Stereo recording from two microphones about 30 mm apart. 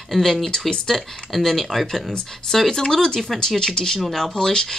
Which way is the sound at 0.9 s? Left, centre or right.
Centre.